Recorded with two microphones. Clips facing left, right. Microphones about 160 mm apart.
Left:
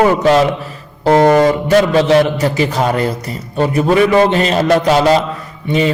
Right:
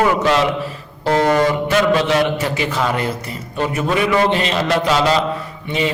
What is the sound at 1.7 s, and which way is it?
A man's voice, 40° left (ahead or behind).